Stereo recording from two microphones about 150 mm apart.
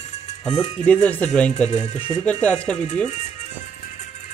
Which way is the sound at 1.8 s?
40° left (ahead or behind).